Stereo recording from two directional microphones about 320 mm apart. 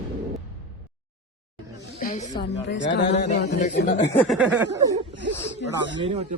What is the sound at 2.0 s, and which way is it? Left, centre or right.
Speech, left.